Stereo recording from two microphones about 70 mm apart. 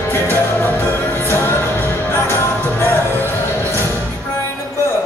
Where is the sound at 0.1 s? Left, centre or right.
Left.